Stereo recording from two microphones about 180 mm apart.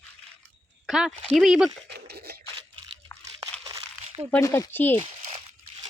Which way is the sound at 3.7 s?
15° right (ahead or behind).